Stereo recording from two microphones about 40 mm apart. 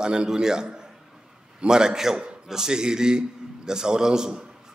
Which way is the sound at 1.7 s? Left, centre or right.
Centre.